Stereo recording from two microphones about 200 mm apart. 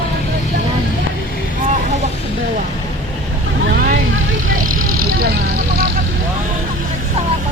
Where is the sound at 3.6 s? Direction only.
45° right (ahead or behind).